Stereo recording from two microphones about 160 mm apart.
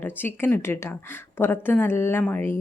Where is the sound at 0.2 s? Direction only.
15° left (ahead or behind).